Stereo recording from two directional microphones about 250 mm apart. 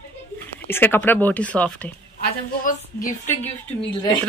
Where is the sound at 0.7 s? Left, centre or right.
Centre.